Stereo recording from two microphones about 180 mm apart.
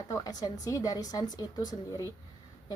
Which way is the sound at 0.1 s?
20° left (ahead or behind).